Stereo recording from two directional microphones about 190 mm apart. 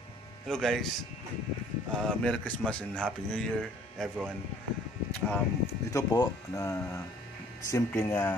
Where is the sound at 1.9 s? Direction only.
5° left (ahead or behind).